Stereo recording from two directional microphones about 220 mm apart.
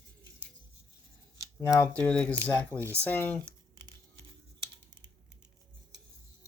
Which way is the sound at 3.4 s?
20° right (ahead or behind).